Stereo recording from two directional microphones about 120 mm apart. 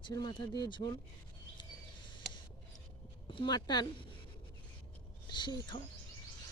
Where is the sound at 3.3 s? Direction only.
40° left (ahead or behind).